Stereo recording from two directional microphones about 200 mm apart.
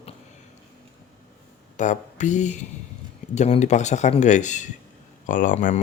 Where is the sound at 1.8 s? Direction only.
35° left (ahead or behind).